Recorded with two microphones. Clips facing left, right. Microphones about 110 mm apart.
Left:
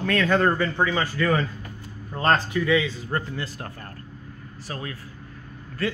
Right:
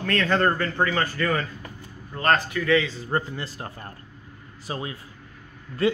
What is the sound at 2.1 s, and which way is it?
Speech, 25° left (ahead or behind).